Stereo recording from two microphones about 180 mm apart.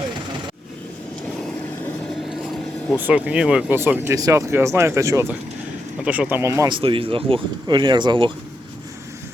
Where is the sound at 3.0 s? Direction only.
10° right (ahead or behind).